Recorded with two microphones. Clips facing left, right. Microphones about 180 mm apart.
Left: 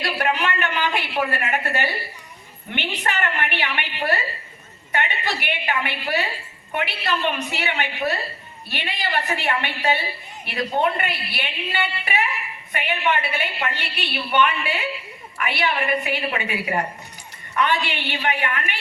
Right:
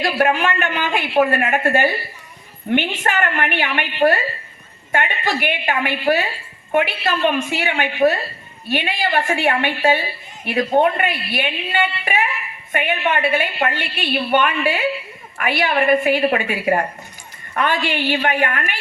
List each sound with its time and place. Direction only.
0.0 s a woman's voice: 45° right (ahead or behind)